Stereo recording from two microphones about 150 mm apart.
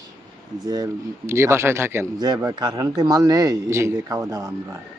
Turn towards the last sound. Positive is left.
turn(degrees=-25)  # may be behind; listen again after turning